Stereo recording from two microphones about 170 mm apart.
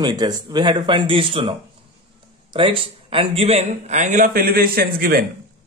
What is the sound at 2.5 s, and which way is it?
Speech, 30° right (ahead or behind).